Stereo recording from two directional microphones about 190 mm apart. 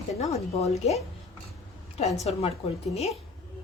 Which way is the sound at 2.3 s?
30° left (ahead or behind).